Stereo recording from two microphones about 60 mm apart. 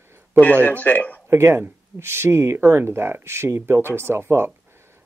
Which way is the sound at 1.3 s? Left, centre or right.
Right.